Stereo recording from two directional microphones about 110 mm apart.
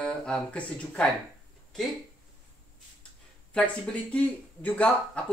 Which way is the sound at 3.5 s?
10° left (ahead or behind).